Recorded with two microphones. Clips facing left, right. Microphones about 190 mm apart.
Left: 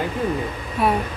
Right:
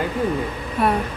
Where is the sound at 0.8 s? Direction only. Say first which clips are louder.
Even; centre (ahead or behind).